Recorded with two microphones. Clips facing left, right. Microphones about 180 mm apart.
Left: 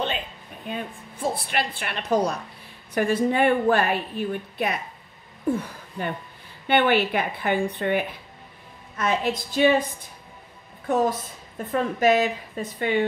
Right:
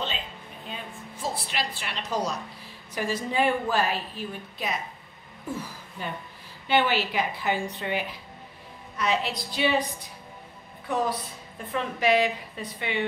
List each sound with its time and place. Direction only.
0.7 s a woman's voice: 55° left (ahead or behind)
10.9 s a woman's voice: 45° left (ahead or behind)